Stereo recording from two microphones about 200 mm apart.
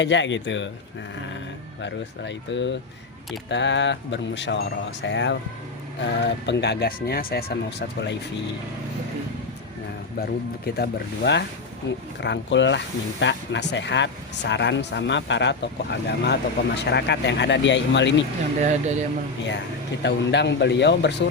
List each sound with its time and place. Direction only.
0.0 s speech: 65° left (ahead or behind)
1.8 s speech: 65° left (ahead or behind)
10.8 s speech: 55° left (ahead or behind)
18.6 s speech: 35° right (ahead or behind)
20.0 s speech: 60° left (ahead or behind)